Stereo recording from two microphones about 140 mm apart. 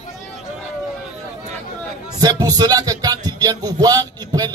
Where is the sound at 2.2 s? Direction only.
25° right (ahead or behind).